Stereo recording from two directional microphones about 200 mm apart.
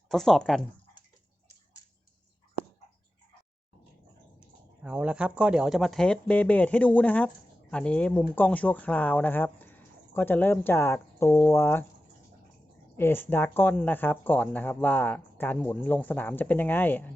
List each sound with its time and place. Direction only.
0.1 s speech: centre (ahead or behind)
4.4 s speech: 5° right (ahead or behind); by 11.9 s 10° left (ahead or behind)
13.0 s speech: 10° left (ahead or behind)